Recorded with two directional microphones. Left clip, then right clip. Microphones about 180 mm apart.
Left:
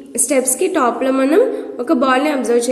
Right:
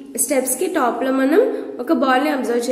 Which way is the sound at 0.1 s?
20° left (ahead or behind).